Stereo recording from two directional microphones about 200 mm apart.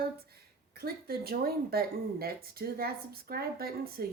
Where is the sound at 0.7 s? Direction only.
50° right (ahead or behind).